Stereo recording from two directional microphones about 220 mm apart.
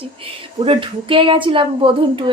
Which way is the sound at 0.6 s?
25° right (ahead or behind).